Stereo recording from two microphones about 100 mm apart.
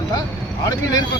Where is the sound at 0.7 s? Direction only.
40° left (ahead or behind).